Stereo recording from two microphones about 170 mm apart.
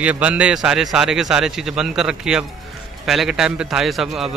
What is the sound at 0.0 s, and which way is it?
A man's voice, 10° right (ahead or behind).